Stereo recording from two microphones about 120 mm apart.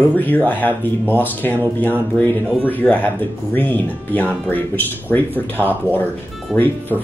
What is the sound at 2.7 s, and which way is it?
Speech, 15° left (ahead or behind).